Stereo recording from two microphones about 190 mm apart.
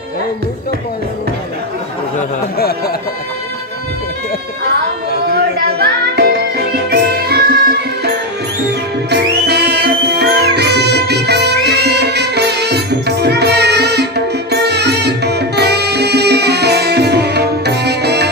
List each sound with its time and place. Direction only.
5.8 s music: 60° right (ahead or behind)